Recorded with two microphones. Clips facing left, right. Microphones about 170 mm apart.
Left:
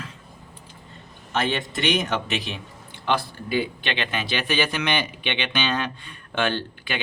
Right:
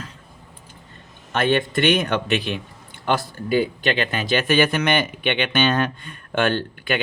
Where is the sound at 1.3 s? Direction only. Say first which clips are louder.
Right 5 dB; 55° right (ahead or behind).